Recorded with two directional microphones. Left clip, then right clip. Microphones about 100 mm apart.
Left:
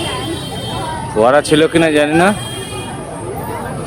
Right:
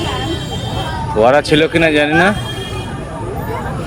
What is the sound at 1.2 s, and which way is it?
Speech, 35° left (ahead or behind).